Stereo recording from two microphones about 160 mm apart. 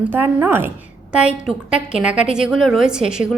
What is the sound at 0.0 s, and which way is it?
A woman's voice, 10° right (ahead or behind).